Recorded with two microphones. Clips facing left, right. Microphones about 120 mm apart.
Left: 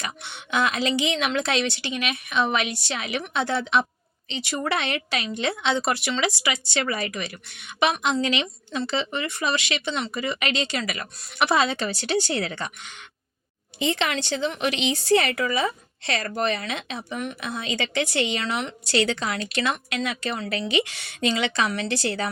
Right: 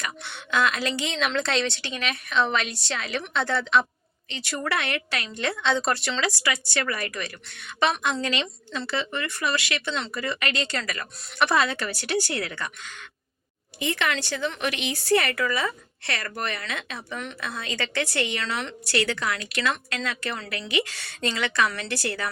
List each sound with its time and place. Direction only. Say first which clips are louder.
0.0 s a woman's voice: even; 15° left (ahead or behind)
19.7 s speech: left 3 dB; 15° left (ahead or behind)